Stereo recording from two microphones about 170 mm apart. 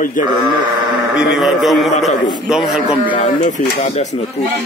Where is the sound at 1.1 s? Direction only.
5° right (ahead or behind).